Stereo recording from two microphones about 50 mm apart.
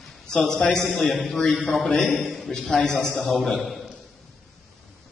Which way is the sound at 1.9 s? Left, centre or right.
Left.